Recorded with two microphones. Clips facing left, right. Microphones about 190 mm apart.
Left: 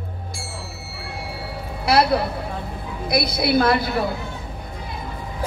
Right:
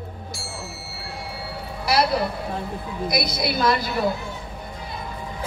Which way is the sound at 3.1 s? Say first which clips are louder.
Left 7 dB; 55° left (ahead or behind).